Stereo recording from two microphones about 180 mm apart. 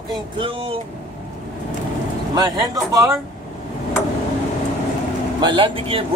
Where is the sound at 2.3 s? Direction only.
20° right (ahead or behind).